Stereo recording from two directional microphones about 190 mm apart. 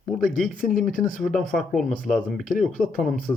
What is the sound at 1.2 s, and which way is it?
Speech, centre (ahead or behind).